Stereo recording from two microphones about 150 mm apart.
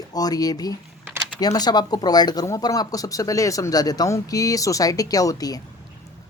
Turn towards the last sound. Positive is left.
turn(degrees=25)  # may be behind; listen again after turning